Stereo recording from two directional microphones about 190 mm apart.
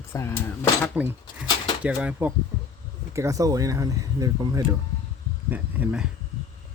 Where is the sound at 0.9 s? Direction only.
10° right (ahead or behind).